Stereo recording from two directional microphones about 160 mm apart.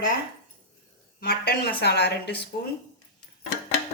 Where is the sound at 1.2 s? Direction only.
75° left (ahead or behind).